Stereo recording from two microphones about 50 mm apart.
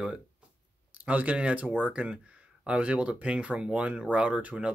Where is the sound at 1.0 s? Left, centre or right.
Right.